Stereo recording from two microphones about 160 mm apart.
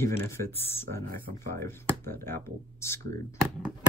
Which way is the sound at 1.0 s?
65° right (ahead or behind).